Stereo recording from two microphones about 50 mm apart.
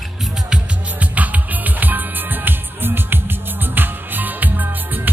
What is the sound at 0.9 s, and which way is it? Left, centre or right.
Music, right.